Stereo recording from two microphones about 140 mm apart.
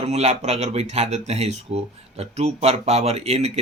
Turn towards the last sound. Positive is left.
turn(degrees=-50)  # may be behind; listen again after turning